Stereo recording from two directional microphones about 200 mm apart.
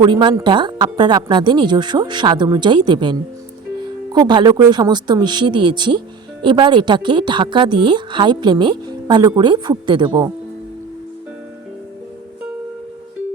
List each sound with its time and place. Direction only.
0.0 s a woman's voice: 25° right (ahead or behind)